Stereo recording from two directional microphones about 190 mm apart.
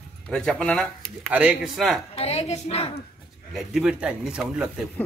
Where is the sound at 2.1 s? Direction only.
35° left (ahead or behind).